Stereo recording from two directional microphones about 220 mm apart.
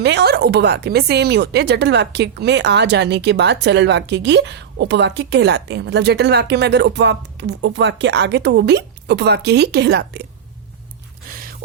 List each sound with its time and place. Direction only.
0.0 s speech: 50° right (ahead or behind)